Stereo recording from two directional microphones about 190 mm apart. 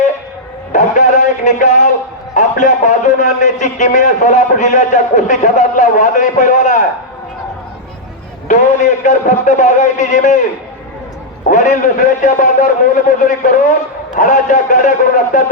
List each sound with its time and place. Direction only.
0.7 s music: 40° left (ahead or behind)
2.3 s a man's voice: 40° left (ahead or behind)
8.4 s a man's voice: 40° left (ahead or behind)
11.4 s a man's voice: 40° left (ahead or behind)